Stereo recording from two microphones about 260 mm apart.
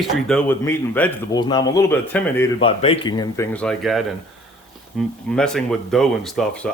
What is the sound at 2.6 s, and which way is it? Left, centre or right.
Speech, left.